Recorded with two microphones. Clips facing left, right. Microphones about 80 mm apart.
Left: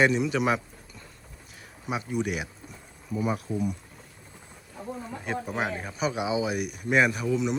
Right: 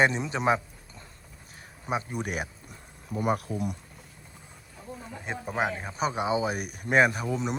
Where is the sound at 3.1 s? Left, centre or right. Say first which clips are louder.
Even; right.